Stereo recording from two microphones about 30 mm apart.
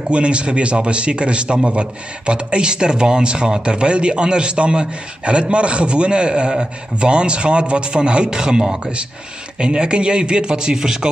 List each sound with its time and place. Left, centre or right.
0.1 s a man's voice: right
9.6 s a man's voice: right